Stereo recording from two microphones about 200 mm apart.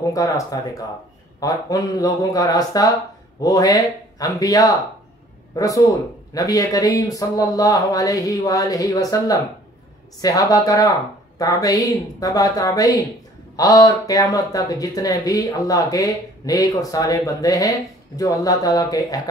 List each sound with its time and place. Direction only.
0.1 s speech: 15° left (ahead or behind)